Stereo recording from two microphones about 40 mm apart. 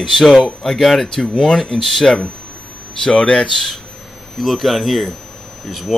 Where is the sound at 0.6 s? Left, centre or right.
Centre.